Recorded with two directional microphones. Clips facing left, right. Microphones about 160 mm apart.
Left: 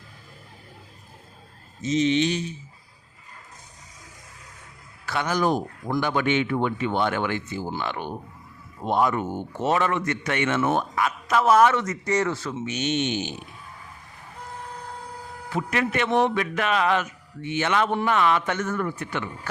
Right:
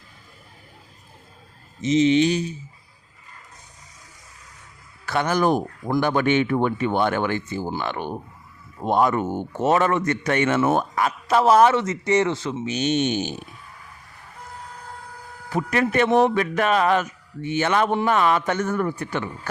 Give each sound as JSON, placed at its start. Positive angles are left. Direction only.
{"t": 1.8, "sound": "speech", "side_deg": -90}
{"t": 2.0, "sound": "a man's voice", "side_deg": -35}
{"t": 5.0, "sound": "a man's voice", "side_deg": -50}
{"t": 12.6, "sound": "a man's voice", "side_deg": -35}
{"t": 15.4, "sound": "a man's voice", "side_deg": -40}